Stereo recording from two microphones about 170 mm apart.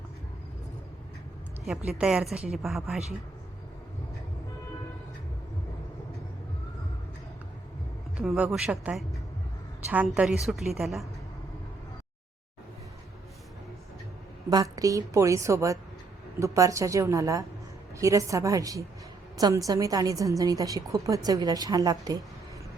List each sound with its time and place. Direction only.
1.6 s a woman's voice: centre (ahead or behind)
8.2 s a woman's voice: centre (ahead or behind)
10.2 s a woman's voice: centre (ahead or behind)
14.5 s a woman's voice: 20° right (ahead or behind)